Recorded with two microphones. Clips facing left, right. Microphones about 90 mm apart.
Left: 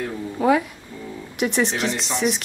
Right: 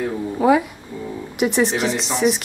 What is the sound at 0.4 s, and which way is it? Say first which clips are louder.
A woman's voice: right 2 dB; 5° right (ahead or behind).